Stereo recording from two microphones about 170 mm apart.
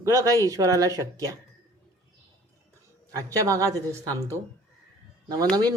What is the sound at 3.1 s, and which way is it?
A woman's voice, 20° right (ahead or behind).